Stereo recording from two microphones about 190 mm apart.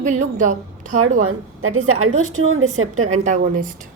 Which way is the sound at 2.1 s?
90° right.